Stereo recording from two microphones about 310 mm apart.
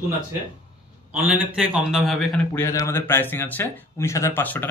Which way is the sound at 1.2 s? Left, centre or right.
Centre.